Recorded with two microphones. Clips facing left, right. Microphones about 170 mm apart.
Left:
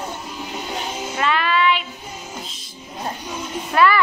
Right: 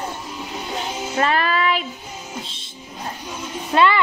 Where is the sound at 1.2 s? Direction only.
40° right (ahead or behind).